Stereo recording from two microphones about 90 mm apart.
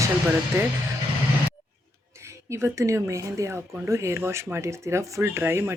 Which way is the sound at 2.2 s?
30° right (ahead or behind).